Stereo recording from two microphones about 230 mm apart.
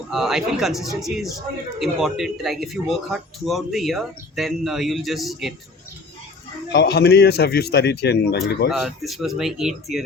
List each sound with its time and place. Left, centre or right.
0.1 s a man's voice: centre
6.7 s a man's voice: left
8.7 s a man's voice: centre